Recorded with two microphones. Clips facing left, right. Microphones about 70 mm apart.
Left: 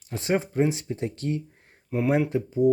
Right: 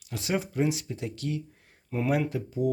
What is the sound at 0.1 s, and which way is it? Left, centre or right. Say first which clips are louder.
Speech: left 4 dB; left.